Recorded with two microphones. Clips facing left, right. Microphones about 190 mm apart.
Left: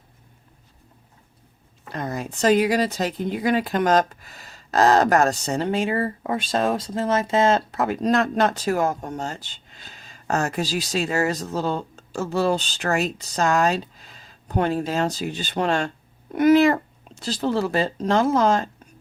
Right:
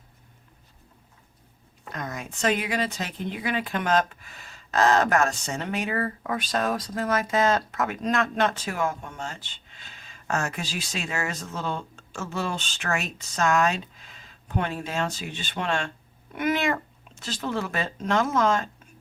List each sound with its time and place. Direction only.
1.9 s a woman's voice: 30° left (ahead or behind)